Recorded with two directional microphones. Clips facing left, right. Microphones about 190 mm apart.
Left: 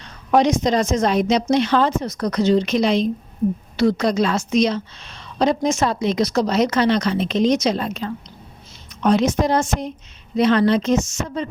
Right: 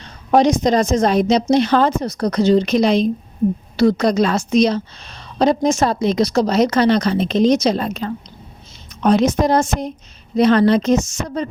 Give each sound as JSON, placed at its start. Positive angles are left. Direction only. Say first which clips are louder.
{"t": 0.3, "sound": "a woman's voice", "louder": "right 3 dB", "side_deg": -35}